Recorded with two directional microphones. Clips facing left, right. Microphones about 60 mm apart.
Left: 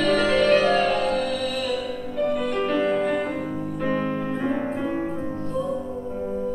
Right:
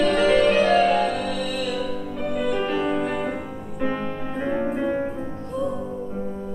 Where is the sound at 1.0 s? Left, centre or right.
Right.